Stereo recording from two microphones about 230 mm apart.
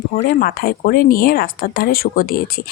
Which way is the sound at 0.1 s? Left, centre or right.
Left.